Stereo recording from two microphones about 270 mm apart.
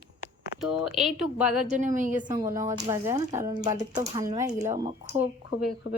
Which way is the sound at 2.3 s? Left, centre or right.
Centre.